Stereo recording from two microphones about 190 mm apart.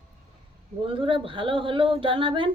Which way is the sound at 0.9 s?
25° right (ahead or behind).